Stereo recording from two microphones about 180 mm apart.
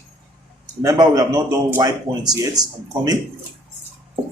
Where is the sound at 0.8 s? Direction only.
20° right (ahead or behind).